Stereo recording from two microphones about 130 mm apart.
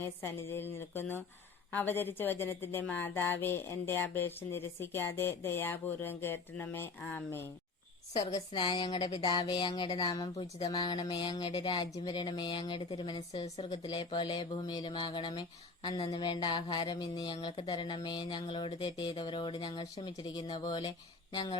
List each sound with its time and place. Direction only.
0.0 s speech: 20° left (ahead or behind)
8.5 s speech: 40° left (ahead or behind)